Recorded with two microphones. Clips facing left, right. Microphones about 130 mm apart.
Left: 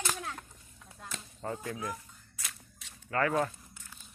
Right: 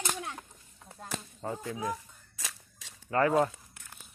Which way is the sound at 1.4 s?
10° right (ahead or behind).